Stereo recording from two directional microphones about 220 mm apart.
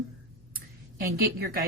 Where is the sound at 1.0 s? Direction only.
45° right (ahead or behind).